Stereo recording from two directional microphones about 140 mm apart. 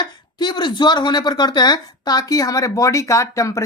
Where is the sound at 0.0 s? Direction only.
30° left (ahead or behind).